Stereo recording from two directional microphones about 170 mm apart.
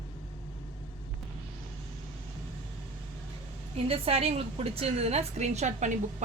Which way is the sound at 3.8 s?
35° right (ahead or behind).